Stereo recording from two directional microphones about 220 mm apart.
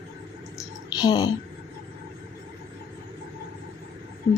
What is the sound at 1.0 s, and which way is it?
Speech, 15° left (ahead or behind).